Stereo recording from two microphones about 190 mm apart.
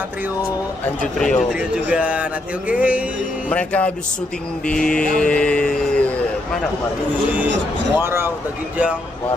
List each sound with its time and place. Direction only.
1.2 s speech: centre (ahead or behind)
2.7 s music: 5° right (ahead or behind)
3.4 s speech: 5° left (ahead or behind)
8.0 s music: 15° right (ahead or behind)